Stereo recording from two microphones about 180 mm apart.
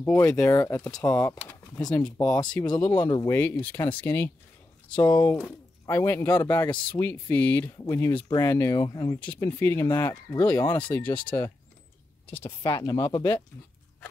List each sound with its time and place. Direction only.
0.0 s speech: 10° left (ahead or behind)
4.8 s speech: 25° left (ahead or behind)
9.2 s speech: 10° left (ahead or behind)
12.4 s speech: 25° left (ahead or behind)